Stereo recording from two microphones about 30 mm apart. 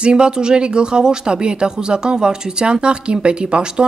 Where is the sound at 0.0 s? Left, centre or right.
Right.